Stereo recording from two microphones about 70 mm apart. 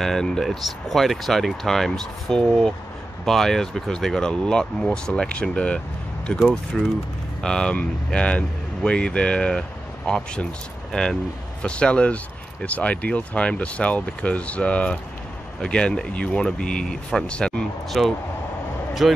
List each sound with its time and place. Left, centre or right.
0.0 s speech: centre